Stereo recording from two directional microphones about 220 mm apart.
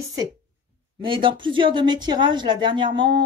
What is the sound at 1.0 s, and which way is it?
Speech, 20° right (ahead or behind).